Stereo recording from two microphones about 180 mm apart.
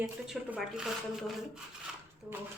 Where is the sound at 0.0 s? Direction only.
5° right (ahead or behind).